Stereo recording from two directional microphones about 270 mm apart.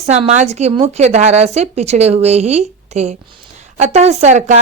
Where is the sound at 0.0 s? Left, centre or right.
Right.